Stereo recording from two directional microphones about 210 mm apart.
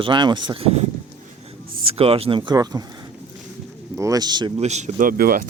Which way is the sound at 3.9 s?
15° right (ahead or behind).